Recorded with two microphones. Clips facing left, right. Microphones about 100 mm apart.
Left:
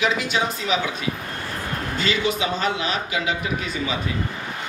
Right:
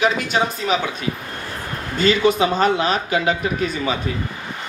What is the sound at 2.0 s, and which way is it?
Speech, 45° right (ahead or behind).